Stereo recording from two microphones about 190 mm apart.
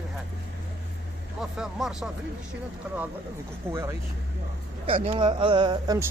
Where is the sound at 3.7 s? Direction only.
15° right (ahead or behind).